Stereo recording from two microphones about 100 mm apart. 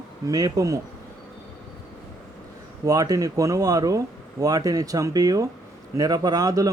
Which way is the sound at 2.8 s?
40° right (ahead or behind).